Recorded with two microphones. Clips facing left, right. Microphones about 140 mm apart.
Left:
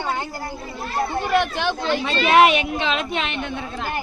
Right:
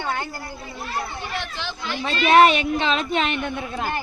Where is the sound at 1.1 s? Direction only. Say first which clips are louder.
Left 10 dB; 55° left (ahead or behind).